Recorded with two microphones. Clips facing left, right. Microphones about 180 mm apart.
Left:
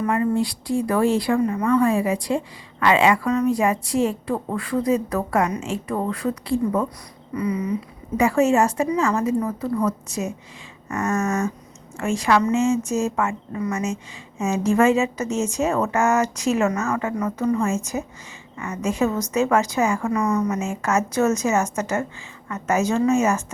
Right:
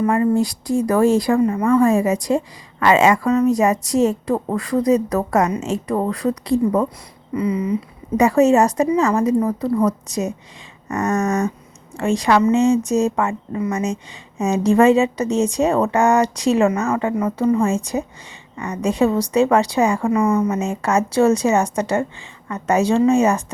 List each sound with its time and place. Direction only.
0.2 s speech: 45° right (ahead or behind)
1.5 s a woman's voice: 25° right (ahead or behind)
1.8 s a woman's voice: 45° right (ahead or behind)
7.3 s a woman's voice: 25° right (ahead or behind)
8.2 s a woman's voice: 40° right (ahead or behind)